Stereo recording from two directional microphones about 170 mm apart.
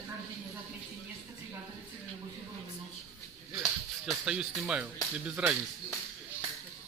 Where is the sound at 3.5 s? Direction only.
Centre (ahead or behind).